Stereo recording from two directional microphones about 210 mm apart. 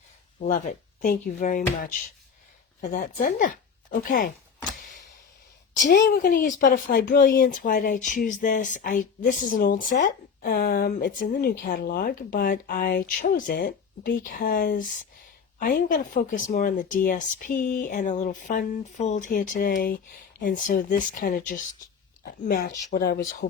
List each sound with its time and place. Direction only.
0.3 s speech: 40° left (ahead or behind)
6.1 s speech: 40° left (ahead or behind)